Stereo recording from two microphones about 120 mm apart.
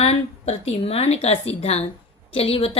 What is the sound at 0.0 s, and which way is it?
A woman's voice, 60° left (ahead or behind).